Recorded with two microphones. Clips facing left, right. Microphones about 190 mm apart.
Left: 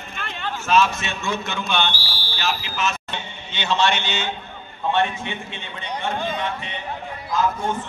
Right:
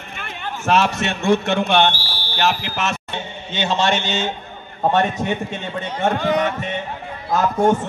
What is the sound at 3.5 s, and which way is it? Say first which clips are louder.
A man's voice: right 2 dB; 45° right (ahead or behind).